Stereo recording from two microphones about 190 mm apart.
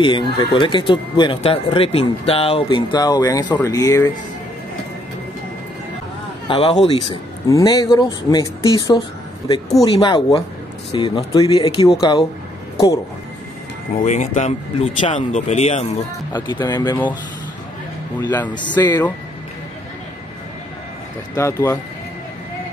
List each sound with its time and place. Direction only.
0.0 s speech: 25° left (ahead or behind)
6.4 s speech: 25° left (ahead or behind)
14.0 s speech: 40° left (ahead or behind)
16.3 s speech: 25° left (ahead or behind)
18.8 s speech: 20° left (ahead or behind)
21.4 s speech: 15° left (ahead or behind)